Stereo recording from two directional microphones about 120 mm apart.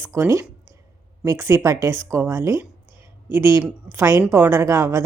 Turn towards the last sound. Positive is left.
turn(degrees=-25)  # may be behind; listen again after turning